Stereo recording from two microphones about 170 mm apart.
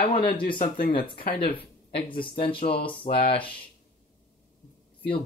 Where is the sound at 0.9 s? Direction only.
30° left (ahead or behind).